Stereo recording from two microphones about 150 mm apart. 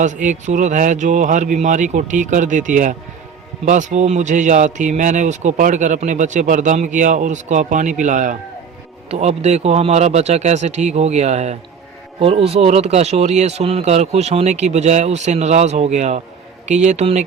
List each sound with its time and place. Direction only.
0.0 s a man's voice: 55° right (ahead or behind)